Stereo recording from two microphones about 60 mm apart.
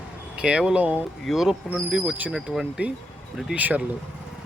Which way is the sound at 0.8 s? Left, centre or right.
Right.